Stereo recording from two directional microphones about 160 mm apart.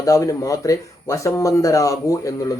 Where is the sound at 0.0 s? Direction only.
20° left (ahead or behind).